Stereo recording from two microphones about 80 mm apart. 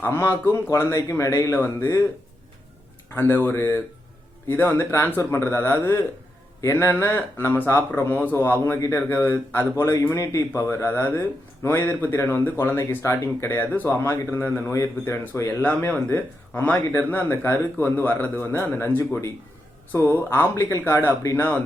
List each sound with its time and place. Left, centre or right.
0.0 s speech: left
3.2 s speech: left